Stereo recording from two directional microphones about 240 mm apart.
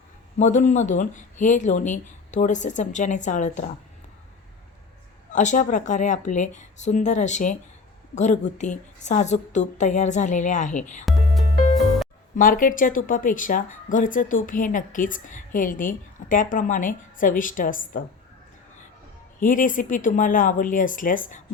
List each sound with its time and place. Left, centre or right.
0.3 s speech: left
5.3 s a woman's voice: left
11.0 s music: centre
12.4 s speech: left
19.4 s speech: left